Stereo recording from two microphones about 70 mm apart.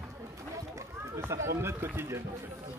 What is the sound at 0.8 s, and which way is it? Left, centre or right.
Speech, right.